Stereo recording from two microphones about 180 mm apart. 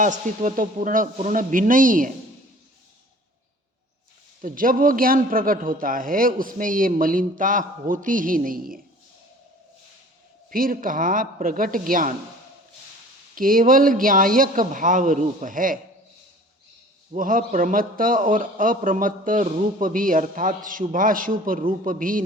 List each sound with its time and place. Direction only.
0.0 s a man's voice: 45° right (ahead or behind)
4.4 s a man's voice: 50° right (ahead or behind)
10.5 s a man's voice: 50° right (ahead or behind)
13.3 s a man's voice: 50° right (ahead or behind)
17.1 s a man's voice: 50° right (ahead or behind)